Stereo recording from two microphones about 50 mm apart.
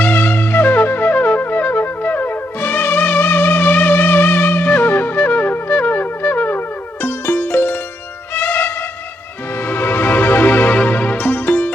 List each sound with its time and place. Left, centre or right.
0.0 s wind instrument: left
2.0 s music: left